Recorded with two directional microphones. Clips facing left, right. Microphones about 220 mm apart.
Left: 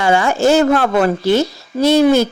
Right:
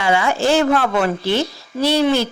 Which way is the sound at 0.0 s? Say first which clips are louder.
Left 4 dB; 45° left (ahead or behind).